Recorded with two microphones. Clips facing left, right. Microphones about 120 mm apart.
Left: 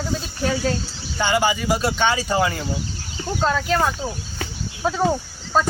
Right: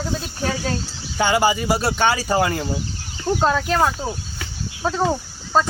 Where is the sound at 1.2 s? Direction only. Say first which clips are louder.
Right 2 dB; 45° right (ahead or behind).